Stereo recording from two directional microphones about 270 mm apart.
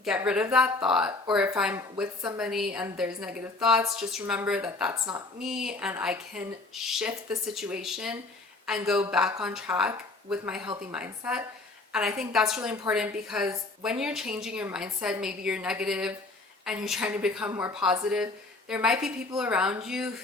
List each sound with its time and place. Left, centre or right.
0.0 s speech: centre
12.5 s speech: centre